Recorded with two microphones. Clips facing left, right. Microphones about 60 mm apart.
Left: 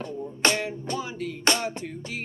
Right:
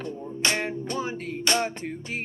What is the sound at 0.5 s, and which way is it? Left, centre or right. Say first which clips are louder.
Music: right 1 dB; right.